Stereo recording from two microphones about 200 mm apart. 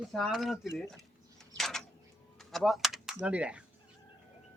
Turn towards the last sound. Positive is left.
turn(degrees=-5)  # may be behind; listen again after turning